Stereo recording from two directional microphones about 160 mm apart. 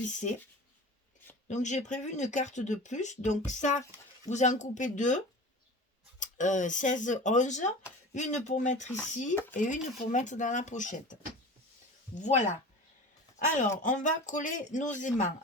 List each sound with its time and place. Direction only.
0.0 s speech: 50° left (ahead or behind)
1.5 s speech: 50° left (ahead or behind)
13.4 s speech: 50° left (ahead or behind)